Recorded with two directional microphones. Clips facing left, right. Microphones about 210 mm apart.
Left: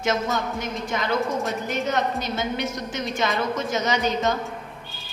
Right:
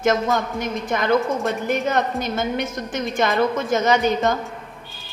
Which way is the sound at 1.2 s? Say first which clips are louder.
Right 3 dB; centre (ahead or behind).